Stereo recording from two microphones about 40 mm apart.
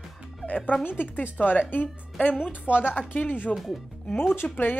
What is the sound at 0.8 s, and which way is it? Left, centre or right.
Speech, left.